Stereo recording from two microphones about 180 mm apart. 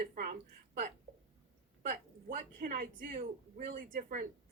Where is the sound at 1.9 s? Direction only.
50° right (ahead or behind).